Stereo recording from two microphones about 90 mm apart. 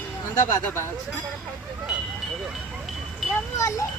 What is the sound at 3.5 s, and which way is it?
Speech, 40° left (ahead or behind).